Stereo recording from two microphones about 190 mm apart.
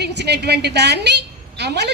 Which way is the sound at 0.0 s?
60° right (ahead or behind).